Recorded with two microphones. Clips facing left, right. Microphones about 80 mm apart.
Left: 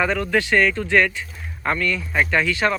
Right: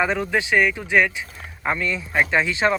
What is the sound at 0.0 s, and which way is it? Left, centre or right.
Speech, centre.